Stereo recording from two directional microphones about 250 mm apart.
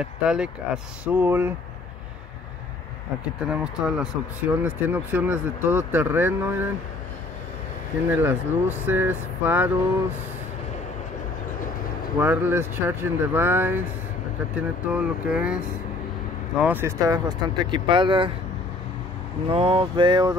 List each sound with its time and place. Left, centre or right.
0.0 s speech: centre
3.3 s speech: centre
8.1 s speech: centre
12.2 s speech: centre
19.5 s a sound: right